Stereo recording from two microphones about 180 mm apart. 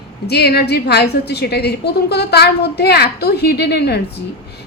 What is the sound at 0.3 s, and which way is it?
A woman's voice, 65° left (ahead or behind).